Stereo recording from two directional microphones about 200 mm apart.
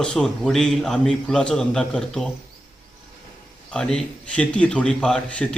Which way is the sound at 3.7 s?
5° left (ahead or behind).